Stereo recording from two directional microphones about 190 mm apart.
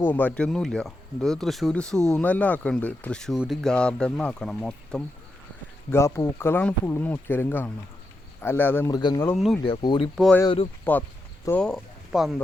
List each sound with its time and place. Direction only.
0.0 s speech: 10° left (ahead or behind)
5.9 s speech: 15° left (ahead or behind)
9.0 s speech: 25° left (ahead or behind)
9.2 s speech: centre (ahead or behind)
9.6 s speech: 25° left (ahead or behind)
10.9 s speech: 10° left (ahead or behind)